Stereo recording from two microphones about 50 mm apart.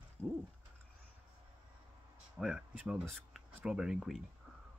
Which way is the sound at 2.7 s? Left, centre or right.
Right.